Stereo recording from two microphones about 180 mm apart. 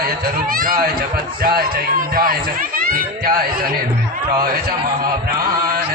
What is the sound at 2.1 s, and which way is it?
Speech, 50° right (ahead or behind).